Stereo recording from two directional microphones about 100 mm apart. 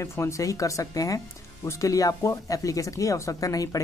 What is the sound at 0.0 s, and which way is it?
Speech, 30° left (ahead or behind).